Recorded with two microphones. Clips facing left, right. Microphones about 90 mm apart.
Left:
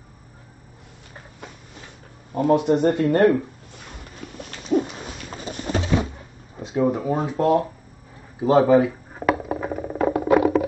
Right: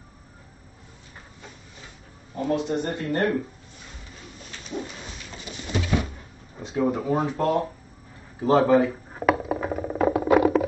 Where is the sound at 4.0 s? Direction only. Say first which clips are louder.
Left 9 dB; 55° left (ahead or behind).